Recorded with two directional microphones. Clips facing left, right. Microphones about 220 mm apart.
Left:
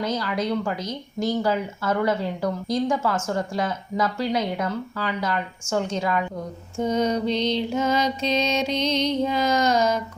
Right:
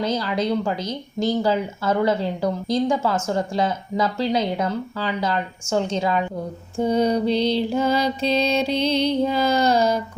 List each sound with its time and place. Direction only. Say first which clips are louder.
0.0 s speech: right 3 dB; 30° right (ahead or behind)
6.7 s mantra: right 3 dB; 35° right (ahead or behind)